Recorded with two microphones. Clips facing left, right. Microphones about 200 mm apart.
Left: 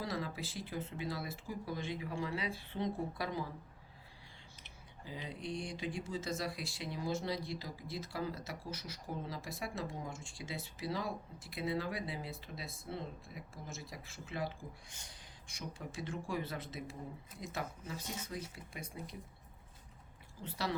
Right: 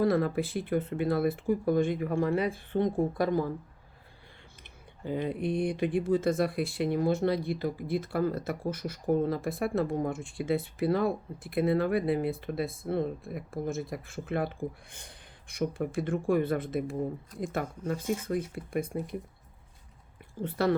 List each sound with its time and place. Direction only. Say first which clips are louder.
0.0 s speech: right 14 dB; 55° right (ahead or behind)
4.6 s speech: right 14 dB; 55° right (ahead or behind)
20.4 s speech: right 12 dB; 55° right (ahead or behind)